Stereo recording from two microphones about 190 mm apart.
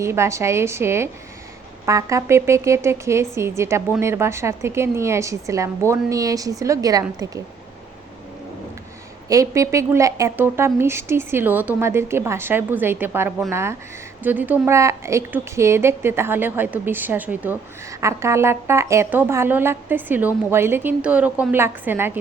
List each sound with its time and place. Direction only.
0.0 s a woman's voice: 15° right (ahead or behind)
9.3 s a woman's voice: 15° right (ahead or behind)